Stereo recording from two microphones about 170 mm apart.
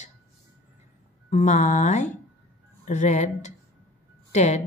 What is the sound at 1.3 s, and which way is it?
Speech, 45° left (ahead or behind).